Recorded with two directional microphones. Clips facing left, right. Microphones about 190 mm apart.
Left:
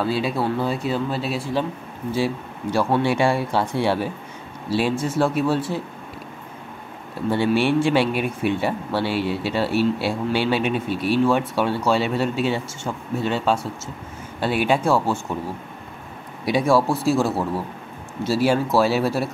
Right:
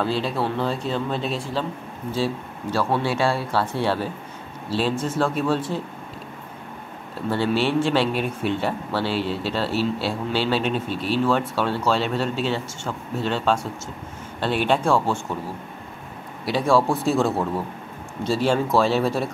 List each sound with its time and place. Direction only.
0.0 s speech: 10° left (ahead or behind)
7.2 s speech: 15° left (ahead or behind)
16.4 s speech: 10° left (ahead or behind)